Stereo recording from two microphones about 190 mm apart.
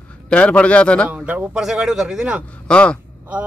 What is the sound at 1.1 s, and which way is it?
Speech, 10° right (ahead or behind).